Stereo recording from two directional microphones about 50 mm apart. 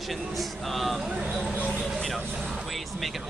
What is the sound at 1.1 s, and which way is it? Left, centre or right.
Speech, right.